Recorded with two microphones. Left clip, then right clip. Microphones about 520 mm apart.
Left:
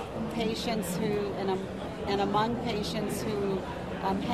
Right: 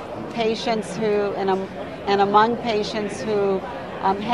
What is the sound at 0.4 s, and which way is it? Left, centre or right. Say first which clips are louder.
Speech: right 10 dB; right.